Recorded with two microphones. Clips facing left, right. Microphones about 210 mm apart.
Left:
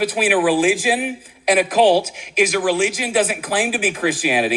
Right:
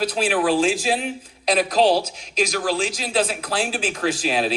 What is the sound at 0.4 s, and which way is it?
Speech, 15° left (ahead or behind).